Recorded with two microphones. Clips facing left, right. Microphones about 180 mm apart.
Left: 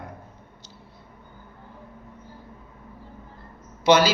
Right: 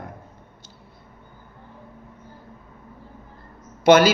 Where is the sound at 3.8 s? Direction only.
50° right (ahead or behind).